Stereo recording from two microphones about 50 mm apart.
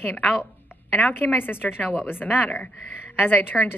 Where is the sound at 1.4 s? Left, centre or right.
Left.